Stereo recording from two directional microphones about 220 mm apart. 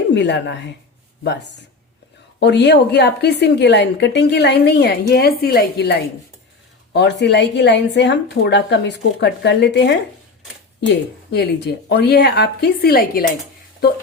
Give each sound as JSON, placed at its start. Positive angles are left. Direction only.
{"t": 0.1, "sound": "a woman's voice", "side_deg": 50}
{"t": 2.4, "sound": "a woman's voice", "side_deg": 50}